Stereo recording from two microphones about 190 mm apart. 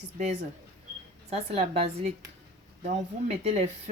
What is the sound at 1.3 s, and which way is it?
Speech, 35° right (ahead or behind).